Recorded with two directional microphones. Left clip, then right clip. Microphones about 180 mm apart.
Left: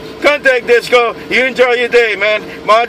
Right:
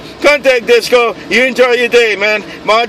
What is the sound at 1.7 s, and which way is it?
Speech, 30° right (ahead or behind).